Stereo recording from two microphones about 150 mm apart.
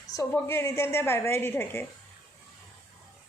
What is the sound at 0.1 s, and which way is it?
A woman's voice, 20° left (ahead or behind).